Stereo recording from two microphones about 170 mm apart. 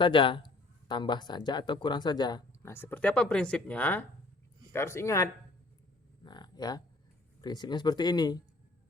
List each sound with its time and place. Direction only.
0.0 s speech: 30° left (ahead or behind)
2.7 s speech: 10° left (ahead or behind)
6.2 s a sound: 25° left (ahead or behind)
7.4 s speech: 25° left (ahead or behind)